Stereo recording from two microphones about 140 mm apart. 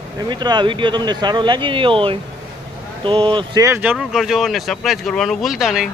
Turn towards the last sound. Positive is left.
turn(degrees=-5)  # may be behind; listen again after turning